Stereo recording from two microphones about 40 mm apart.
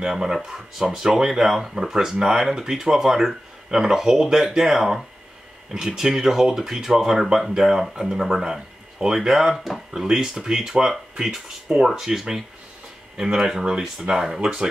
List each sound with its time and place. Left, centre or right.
0.0 s speech: centre